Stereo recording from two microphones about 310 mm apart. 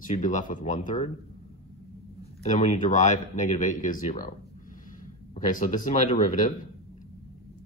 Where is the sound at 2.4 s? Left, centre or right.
Left.